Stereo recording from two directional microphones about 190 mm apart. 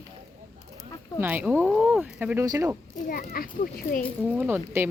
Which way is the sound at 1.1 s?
10° right (ahead or behind).